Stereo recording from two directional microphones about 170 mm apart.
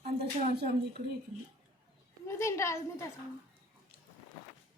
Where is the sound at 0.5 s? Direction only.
65° right (ahead or behind).